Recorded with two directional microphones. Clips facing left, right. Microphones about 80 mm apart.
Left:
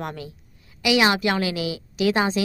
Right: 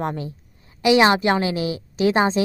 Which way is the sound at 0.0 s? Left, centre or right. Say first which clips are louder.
Right 6 dB; right.